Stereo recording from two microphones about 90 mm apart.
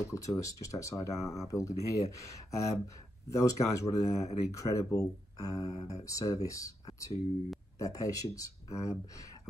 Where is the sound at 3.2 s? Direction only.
35° left (ahead or behind).